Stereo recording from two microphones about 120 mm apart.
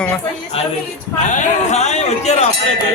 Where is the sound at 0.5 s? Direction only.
55° left (ahead or behind).